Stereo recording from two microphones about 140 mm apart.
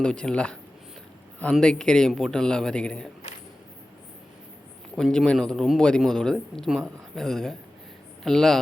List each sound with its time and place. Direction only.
0.0 s speech: 5° left (ahead or behind)
4.9 s speech: 5° left (ahead or behind)